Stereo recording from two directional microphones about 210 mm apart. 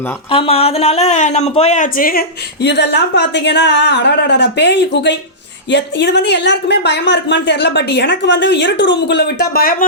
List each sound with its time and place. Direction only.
0.3 s speech: 25° left (ahead or behind); by 9.7 s 50° left (ahead or behind)